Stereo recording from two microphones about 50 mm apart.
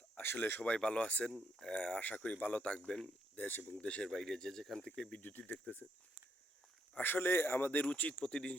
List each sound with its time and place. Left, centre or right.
0.2 s a sound: left
0.6 s speech: left
3.3 s speech: left
3.8 s speech: left
4.1 s speech: centre
5.4 s speech: left
7.0 s speech: left
7.8 s speech: left
8.2 s speech: centre